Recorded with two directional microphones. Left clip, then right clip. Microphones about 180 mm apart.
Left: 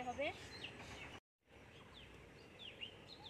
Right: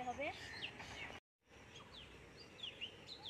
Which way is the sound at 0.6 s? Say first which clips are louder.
Right 2 dB; 50° left (ahead or behind).